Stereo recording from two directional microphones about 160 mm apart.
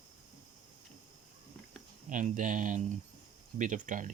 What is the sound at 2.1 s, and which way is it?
Speech, 55° right (ahead or behind).